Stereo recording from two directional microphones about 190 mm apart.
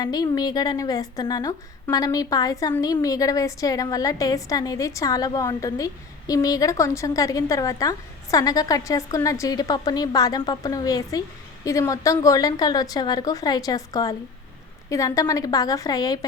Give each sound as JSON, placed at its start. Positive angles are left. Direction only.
{"t": 0.0, "sound": "a woman's voice", "side_deg": 20}